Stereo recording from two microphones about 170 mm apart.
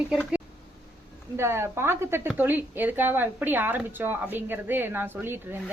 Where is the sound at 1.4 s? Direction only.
15° right (ahead or behind).